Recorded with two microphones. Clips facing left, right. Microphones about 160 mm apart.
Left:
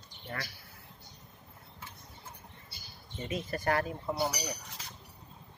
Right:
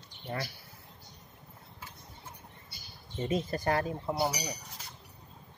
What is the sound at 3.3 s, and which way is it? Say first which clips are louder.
Speech: right 1 dB; 25° right (ahead or behind).